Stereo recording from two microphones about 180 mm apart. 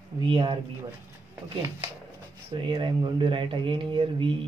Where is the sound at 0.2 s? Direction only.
25° right (ahead or behind).